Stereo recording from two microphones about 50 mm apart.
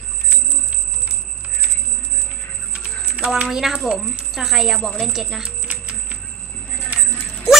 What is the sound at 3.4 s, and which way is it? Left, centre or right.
Speech, centre.